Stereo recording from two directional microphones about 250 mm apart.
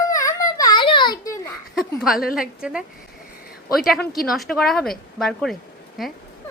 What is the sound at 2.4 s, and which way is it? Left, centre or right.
A woman's voice, centre.